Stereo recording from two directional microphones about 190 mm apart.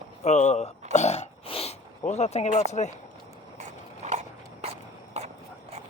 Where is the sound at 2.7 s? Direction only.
35° left (ahead or behind).